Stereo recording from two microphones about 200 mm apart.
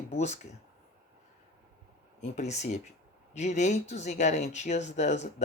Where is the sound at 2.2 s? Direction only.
35° left (ahead or behind).